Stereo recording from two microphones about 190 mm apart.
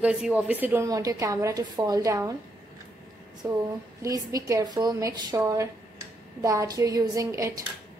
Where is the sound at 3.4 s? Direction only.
15° right (ahead or behind).